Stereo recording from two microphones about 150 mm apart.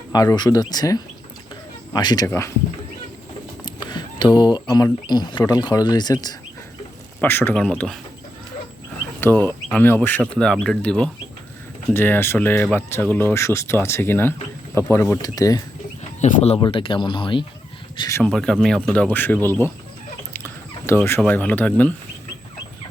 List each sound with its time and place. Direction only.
0.1 s speech: 25° left (ahead or behind)
3.8 s a sound: 30° left (ahead or behind)
4.7 s speech: 30° left (ahead or behind)
7.2 s speech: 15° left (ahead or behind)
9.2 s speech: 15° left (ahead or behind)
16.2 s speech: 45° left (ahead or behind)
16.6 s speech: 35° left (ahead or behind)
18.2 s speech: 5° left (ahead or behind)
20.3 s a sound: 15° left (ahead or behind)
21.2 s speech: 10° left (ahead or behind)